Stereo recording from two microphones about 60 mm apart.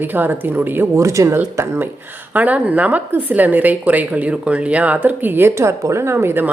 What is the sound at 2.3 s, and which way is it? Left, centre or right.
A woman's voice, right.